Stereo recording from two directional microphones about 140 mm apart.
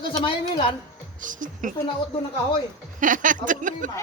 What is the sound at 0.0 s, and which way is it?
Speech, 35° left (ahead or behind).